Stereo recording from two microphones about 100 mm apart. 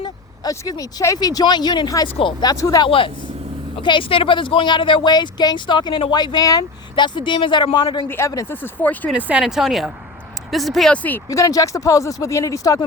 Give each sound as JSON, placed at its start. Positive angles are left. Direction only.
{"t": 0.0, "sound": "speech", "side_deg": 40}
{"t": 2.0, "sound": "speech", "side_deg": 65}
{"t": 2.4, "sound": "speech", "side_deg": 35}
{"t": 2.8, "sound": "speech", "side_deg": 60}
{"t": 6.9, "sound": "speech", "side_deg": 50}
{"t": 8.0, "sound": "speech", "side_deg": 25}
{"t": 9.1, "sound": "speech", "side_deg": -15}
{"t": 9.4, "sound": "speech", "side_deg": -5}
{"t": 10.9, "sound": "speech", "side_deg": 15}
{"t": 11.3, "sound": "speech", "side_deg": 35}